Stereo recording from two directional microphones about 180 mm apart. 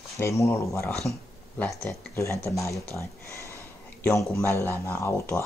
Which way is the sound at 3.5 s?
15° left (ahead or behind).